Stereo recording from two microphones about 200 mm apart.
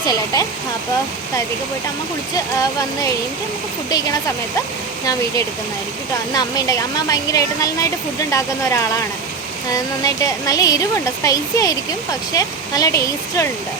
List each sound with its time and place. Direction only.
0.3 s speech: 20° left (ahead or behind)
2.3 s speech: 15° left (ahead or behind)
6.3 s speech: 20° left (ahead or behind)